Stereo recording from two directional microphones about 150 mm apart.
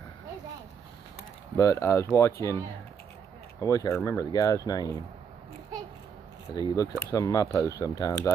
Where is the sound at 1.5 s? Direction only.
20° left (ahead or behind).